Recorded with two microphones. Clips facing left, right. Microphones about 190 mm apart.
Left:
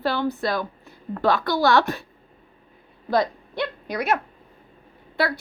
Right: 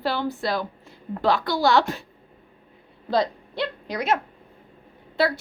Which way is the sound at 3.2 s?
25° right (ahead or behind).